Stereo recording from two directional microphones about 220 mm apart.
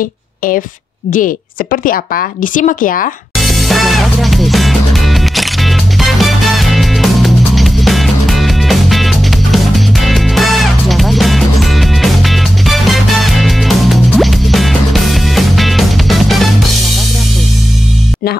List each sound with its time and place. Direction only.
1.1 s a woman's voice: 40° left (ahead or behind)
3.3 s music: centre (ahead or behind)